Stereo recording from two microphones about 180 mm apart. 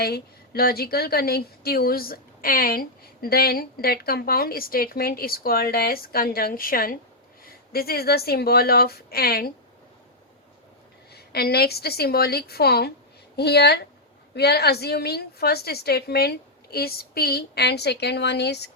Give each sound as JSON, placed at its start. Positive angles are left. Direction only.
{"t": 0.0, "sound": "a woman's voice", "side_deg": 60}
{"t": 11.1, "sound": "a woman's voice", "side_deg": 60}